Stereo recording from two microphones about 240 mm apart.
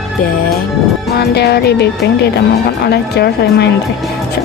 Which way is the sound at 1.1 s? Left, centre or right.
Left.